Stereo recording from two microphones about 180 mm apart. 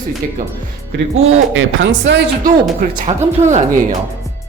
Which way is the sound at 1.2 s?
90° right.